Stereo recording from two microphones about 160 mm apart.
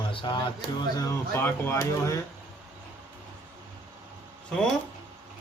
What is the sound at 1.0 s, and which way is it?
Speech, 15° left (ahead or behind).